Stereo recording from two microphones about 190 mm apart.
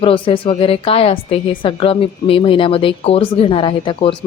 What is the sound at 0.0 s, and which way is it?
A woman's voice, 30° left (ahead or behind).